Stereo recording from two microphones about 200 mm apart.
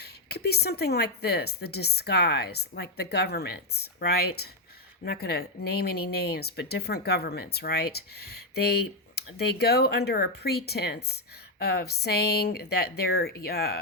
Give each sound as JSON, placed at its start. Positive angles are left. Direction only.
{"t": 0.0, "sound": "speech", "side_deg": 55}